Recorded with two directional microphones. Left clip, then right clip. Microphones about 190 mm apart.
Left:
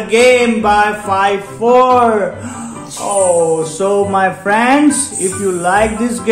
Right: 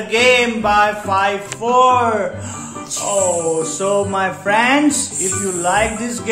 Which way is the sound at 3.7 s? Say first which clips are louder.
Left 5 dB; 35° left (ahead or behind).